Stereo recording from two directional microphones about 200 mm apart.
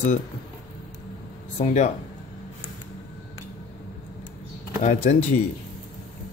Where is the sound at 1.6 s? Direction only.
40° left (ahead or behind).